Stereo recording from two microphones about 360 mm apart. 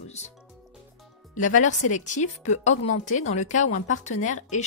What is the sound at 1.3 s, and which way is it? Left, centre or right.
Speech, left.